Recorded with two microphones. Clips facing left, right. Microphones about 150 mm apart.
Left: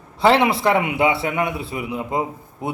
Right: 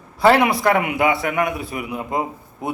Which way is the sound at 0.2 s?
25° left (ahead or behind).